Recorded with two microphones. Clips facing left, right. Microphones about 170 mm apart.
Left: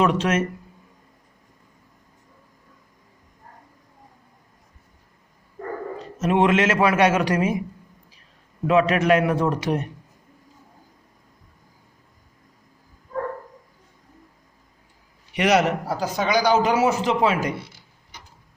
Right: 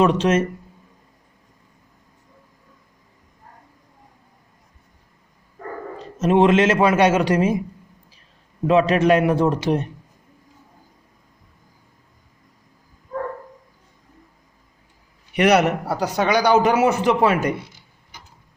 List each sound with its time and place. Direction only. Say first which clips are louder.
0.0 s a man's voice: right 3 dB; 30° right (ahead or behind)
6.1 s a man's voice: right 4 dB; 30° right (ahead or behind)
8.6 s a man's voice: right 2 dB; 30° right (ahead or behind)
15.3 s a man's voice: right 3 dB; 60° right (ahead or behind)